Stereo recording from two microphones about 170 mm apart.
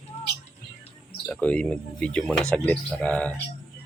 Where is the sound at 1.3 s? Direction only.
10° left (ahead or behind).